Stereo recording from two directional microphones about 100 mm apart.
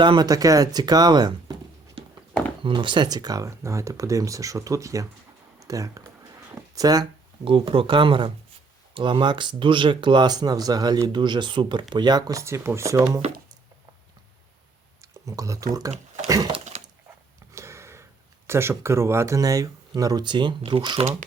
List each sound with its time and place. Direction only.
0.0 s speech: 50° right (ahead or behind)
2.0 s horse: 60° right (ahead or behind)
2.6 s speech: 50° right (ahead or behind)
7.4 s speech: 60° right (ahead or behind); by 12.4 s 45° right (ahead or behind)
12.4 s speech: 30° right (ahead or behind)
15.0 s speech: 35° right (ahead or behind)
16.7 s a sound: 90° right
17.5 s a sound: 30° right (ahead or behind)
18.4 s speech: 25° right (ahead or behind); by 21.0 s 50° right (ahead or behind)